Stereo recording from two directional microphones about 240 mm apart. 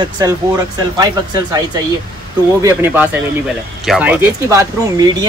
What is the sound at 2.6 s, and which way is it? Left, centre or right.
Speech, centre.